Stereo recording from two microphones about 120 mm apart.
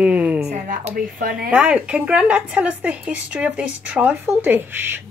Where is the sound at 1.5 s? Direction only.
10° right (ahead or behind).